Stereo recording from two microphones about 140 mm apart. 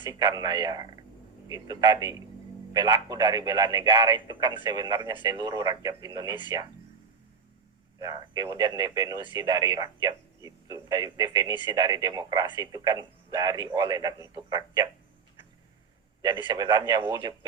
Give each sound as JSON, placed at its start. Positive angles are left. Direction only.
{"t": 0.0, "sound": "speech", "side_deg": -30}
{"t": 7.9, "sound": "speech", "side_deg": -25}
{"t": 16.2, "sound": "speech", "side_deg": -35}